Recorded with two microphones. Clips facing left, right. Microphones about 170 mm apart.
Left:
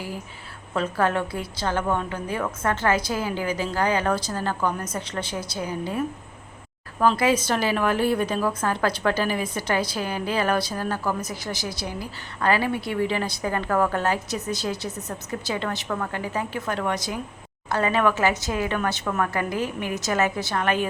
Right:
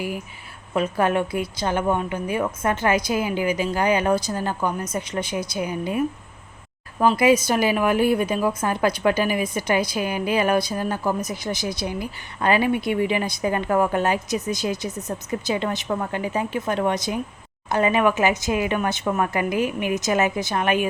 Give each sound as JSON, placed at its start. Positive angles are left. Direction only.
{"t": 0.7, "sound": "a woman's voice", "side_deg": -15}
{"t": 7.0, "sound": "a woman's voice", "side_deg": -15}